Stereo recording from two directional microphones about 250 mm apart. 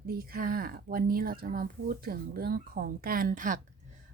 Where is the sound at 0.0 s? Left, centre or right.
Right.